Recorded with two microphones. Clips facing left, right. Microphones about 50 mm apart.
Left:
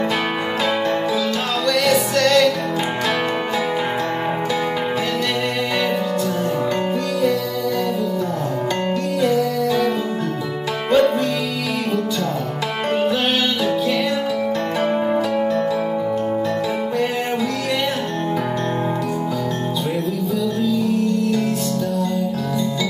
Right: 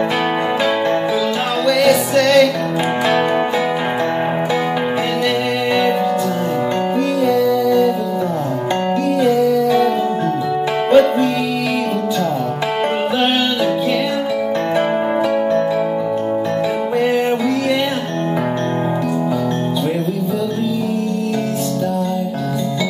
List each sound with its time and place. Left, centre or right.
1.7 s music: centre
7.2 s music: right
9.2 s music: right
10.9 s music: right